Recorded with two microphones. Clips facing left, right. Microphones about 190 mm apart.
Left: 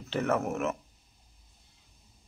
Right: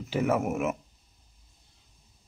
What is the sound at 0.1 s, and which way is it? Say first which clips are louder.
Speech: right 2 dB; 10° right (ahead or behind).